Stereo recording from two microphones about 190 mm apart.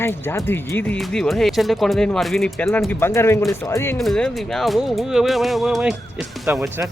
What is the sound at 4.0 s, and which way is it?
Speech, centre (ahead or behind).